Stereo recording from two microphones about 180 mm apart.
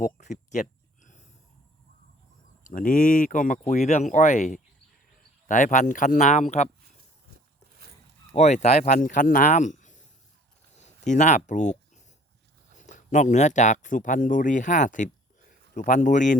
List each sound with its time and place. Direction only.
0.0 s a sound: 45° left (ahead or behind)
2.6 s speech: 50° left (ahead or behind)
8.3 s speech: 40° left (ahead or behind)